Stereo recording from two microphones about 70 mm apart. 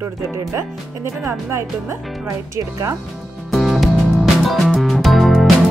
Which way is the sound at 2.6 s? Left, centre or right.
Right.